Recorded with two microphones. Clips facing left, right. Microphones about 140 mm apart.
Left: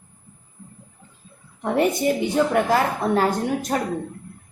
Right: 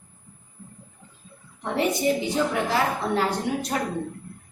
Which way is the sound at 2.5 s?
50° left (ahead or behind).